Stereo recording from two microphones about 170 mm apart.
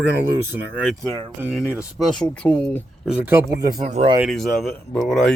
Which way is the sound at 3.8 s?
45° right (ahead or behind).